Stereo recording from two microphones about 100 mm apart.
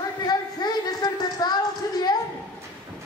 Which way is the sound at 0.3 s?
45° left (ahead or behind).